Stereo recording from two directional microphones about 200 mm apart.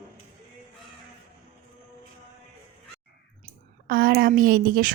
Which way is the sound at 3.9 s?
50° right (ahead or behind).